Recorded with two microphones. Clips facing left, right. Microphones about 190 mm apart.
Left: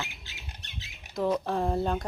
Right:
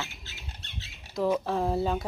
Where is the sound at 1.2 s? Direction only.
5° right (ahead or behind).